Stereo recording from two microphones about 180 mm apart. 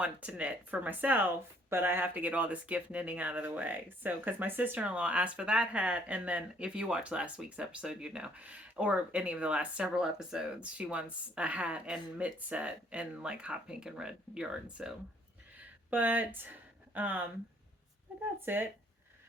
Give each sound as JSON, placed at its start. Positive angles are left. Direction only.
{"t": 0.0, "sound": "speech", "side_deg": -5}
{"t": 15.5, "sound": "a sound", "side_deg": -10}
{"t": 18.4, "sound": "speech", "side_deg": -10}